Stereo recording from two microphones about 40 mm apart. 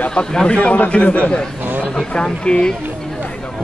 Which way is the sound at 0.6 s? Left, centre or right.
Left.